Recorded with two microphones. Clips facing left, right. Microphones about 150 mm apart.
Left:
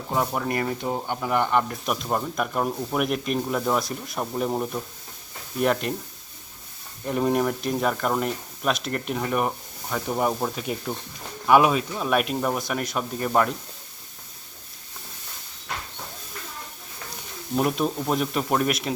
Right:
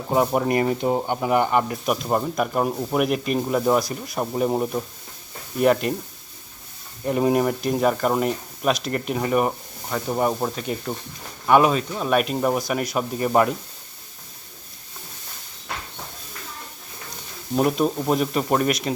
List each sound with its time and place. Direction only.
0.1 s speech: 20° right (ahead or behind); by 5.9 s centre (ahead or behind)
7.0 s speech: 5° right (ahead or behind)
17.6 s speech: centre (ahead or behind)